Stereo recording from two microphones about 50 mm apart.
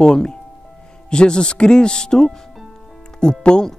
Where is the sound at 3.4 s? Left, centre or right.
Centre.